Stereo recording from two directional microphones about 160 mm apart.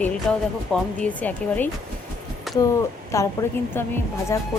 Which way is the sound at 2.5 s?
Centre (ahead or behind).